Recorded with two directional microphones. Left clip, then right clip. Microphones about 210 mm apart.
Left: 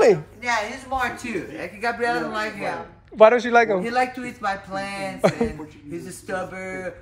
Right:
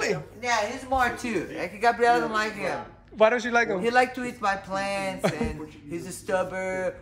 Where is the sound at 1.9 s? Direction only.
Centre (ahead or behind).